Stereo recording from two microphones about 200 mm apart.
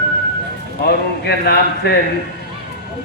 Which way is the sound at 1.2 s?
55° left (ahead or behind).